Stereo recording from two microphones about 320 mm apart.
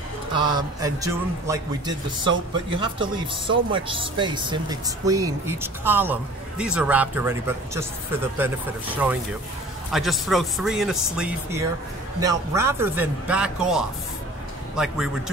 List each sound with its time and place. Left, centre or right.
0.4 s speech: centre
8.9 s speech: centre